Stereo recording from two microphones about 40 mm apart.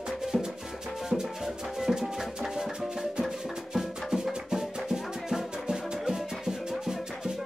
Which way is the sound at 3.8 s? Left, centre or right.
Centre.